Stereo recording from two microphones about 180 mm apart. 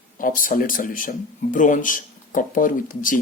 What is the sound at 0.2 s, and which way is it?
Speech, 50° left (ahead or behind).